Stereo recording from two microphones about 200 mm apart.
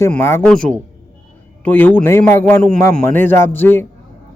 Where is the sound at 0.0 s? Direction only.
10° left (ahead or behind).